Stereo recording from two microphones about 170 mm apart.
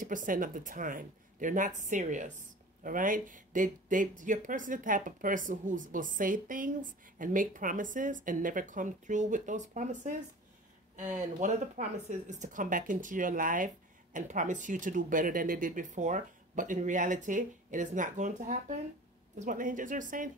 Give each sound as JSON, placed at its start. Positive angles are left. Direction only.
{"t": 0.0, "sound": "speech", "side_deg": -50}
{"t": 11.1, "sound": "speech", "side_deg": -45}